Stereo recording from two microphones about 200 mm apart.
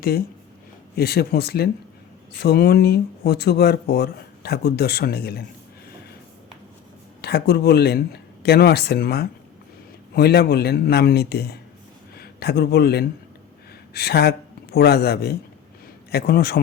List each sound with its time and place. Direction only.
0.9 s speech: 50° left (ahead or behind)
7.2 s a man's voice: 50° left (ahead or behind)